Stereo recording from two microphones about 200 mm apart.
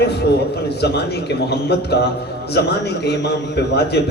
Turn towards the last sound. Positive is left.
turn(degrees=55)  # may be behind; listen again after turning